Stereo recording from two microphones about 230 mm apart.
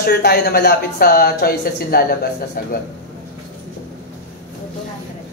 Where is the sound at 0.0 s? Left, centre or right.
Left.